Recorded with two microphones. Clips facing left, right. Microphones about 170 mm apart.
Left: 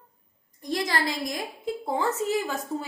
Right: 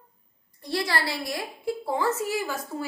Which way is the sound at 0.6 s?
15° left (ahead or behind).